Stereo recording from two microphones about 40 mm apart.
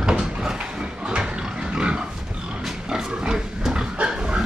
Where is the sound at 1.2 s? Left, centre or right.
Centre.